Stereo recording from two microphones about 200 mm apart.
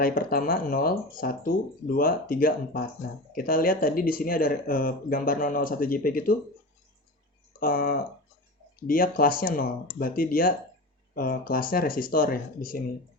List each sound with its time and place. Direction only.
0.0 s speech: 45° left (ahead or behind)
7.6 s speech: 45° left (ahead or behind)